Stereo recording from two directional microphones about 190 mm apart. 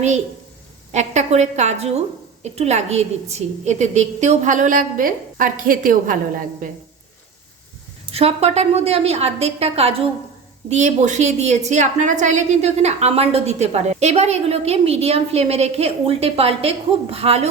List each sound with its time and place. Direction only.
0.9 s a woman's voice: 35° right (ahead or behind)
8.1 s a woman's voice: 30° right (ahead or behind)